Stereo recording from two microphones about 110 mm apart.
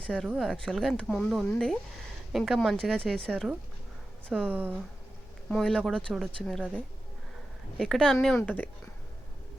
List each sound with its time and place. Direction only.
0.3 s speech: centre (ahead or behind)
4.3 s speech: 15° right (ahead or behind)
5.5 s speech: 5° left (ahead or behind)
8.4 s speech: 15° left (ahead or behind)